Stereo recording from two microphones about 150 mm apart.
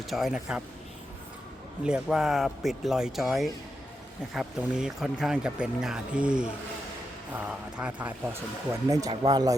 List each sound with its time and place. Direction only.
0.0 s speech: centre (ahead or behind)
1.8 s speech: 5° right (ahead or behind)
8.9 s speech: 25° right (ahead or behind)